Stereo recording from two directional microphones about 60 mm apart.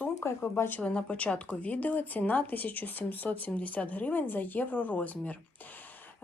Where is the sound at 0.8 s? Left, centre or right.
Centre.